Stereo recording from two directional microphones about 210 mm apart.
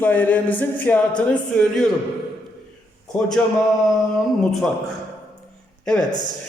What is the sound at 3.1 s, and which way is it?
Speech, 5° left (ahead or behind).